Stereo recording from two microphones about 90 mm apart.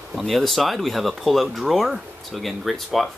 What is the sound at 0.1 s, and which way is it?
Speech, centre (ahead or behind).